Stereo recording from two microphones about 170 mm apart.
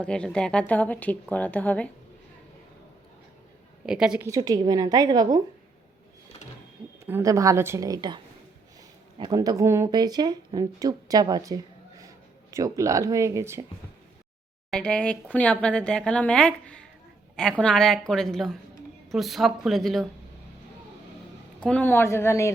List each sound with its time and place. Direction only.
0.0 s a woman's voice: 5° left (ahead or behind)
3.8 s speech: 5° right (ahead or behind)
4.3 s a woman's voice: 20° right (ahead or behind)
7.0 s a woman's voice: 20° right (ahead or behind)
14.7 s speech: 5° left (ahead or behind)
21.6 s a woman's voice: 10° left (ahead or behind)